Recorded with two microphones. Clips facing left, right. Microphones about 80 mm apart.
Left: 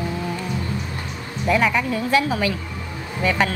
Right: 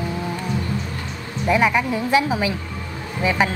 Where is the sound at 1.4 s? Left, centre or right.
Centre.